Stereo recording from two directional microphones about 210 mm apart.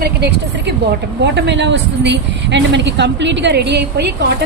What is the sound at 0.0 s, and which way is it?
A woman's voice, 50° right (ahead or behind).